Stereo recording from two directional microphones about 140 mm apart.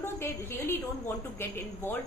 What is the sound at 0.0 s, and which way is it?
A woman's voice, 15° left (ahead or behind).